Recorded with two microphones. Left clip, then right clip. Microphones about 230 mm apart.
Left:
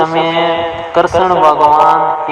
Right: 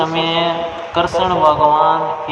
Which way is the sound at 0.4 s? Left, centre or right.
Left.